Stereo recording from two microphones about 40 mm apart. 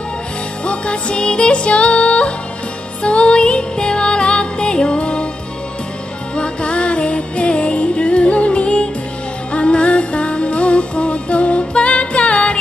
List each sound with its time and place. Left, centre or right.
0.7 s music: left
6.3 s music: left